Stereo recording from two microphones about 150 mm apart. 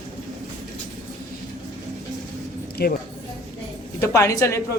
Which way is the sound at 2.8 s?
90° left.